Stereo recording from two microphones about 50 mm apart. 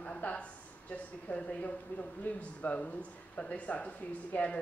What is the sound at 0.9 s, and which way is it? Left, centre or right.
Speech, left.